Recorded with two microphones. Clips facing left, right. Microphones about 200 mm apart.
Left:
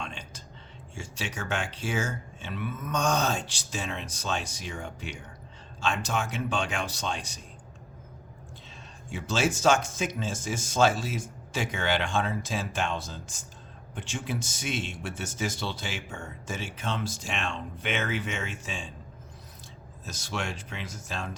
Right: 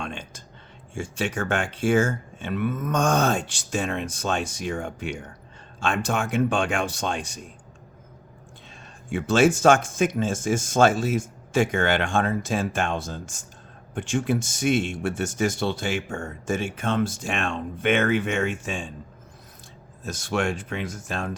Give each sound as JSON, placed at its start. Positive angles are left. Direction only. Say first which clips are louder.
{"t": 0.0, "sound": "whispering", "louder": "right 5 dB", "side_deg": -50}
{"t": 0.9, "sound": "speech", "louder": "right 9 dB", "side_deg": -55}
{"t": 9.0, "sound": "speech", "louder": "right 9 dB", "side_deg": -55}
{"t": 20.1, "sound": "speech", "louder": "right 9 dB", "side_deg": -55}